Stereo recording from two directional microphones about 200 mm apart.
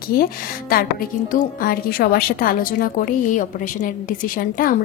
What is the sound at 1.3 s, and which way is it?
A woman's voice, 45° left (ahead or behind).